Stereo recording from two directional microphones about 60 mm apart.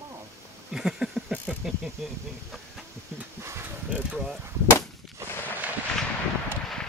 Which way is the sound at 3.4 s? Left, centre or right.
Right.